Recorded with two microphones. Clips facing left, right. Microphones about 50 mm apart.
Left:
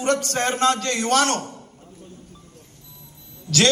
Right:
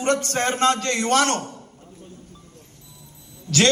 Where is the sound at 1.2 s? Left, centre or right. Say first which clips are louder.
Even; centre.